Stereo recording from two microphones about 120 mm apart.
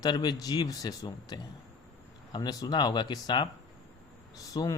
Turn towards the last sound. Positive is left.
turn(degrees=30)  # may be behind; listen again after turning